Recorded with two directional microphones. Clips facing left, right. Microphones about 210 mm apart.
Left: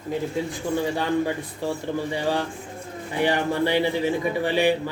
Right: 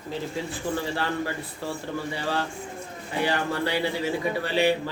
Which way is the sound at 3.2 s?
20° left (ahead or behind).